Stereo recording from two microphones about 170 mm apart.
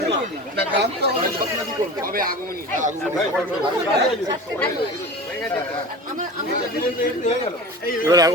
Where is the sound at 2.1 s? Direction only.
60° right (ahead or behind).